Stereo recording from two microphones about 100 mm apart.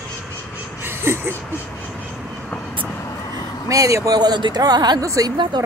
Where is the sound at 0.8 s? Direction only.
20° right (ahead or behind).